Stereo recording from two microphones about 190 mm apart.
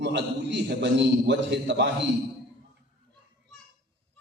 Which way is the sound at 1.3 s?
65° right (ahead or behind).